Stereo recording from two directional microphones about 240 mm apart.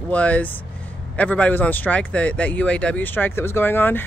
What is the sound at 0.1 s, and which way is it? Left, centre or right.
Speech, centre.